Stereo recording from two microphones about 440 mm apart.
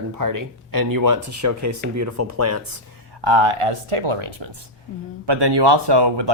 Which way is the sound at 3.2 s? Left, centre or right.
Right.